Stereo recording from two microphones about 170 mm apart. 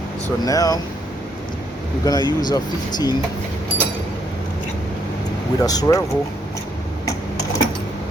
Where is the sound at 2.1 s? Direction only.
25° left (ahead or behind).